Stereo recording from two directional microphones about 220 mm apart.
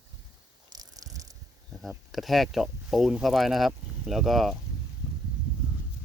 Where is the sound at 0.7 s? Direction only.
15° right (ahead or behind).